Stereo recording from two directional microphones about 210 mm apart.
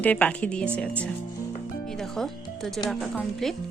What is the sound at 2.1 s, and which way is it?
Speech, centre (ahead or behind).